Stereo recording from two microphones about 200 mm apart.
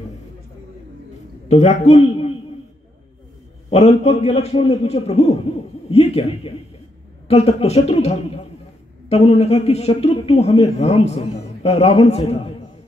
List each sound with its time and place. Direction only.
1.5 s a man's voice: 35° left (ahead or behind)
3.7 s a man's voice: 35° left (ahead or behind)